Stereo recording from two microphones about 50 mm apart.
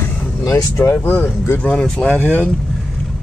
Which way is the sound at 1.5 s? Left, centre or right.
Left.